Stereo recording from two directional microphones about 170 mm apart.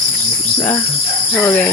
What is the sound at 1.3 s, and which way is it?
Speech, 5° left (ahead or behind).